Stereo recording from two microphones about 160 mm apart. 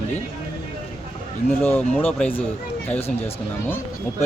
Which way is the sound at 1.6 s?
10° left (ahead or behind).